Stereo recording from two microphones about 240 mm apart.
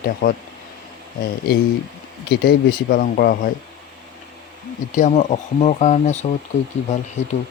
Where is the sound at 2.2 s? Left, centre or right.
Left.